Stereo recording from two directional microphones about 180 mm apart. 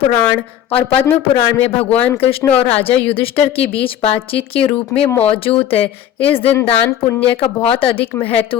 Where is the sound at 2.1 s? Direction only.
30° left (ahead or behind).